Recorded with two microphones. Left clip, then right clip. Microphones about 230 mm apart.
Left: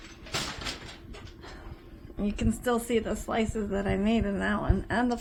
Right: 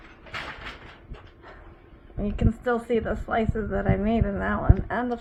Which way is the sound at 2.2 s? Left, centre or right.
Left.